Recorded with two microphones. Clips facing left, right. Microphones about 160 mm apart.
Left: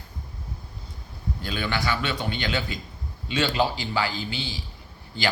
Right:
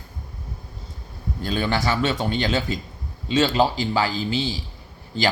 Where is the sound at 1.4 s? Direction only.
40° right (ahead or behind).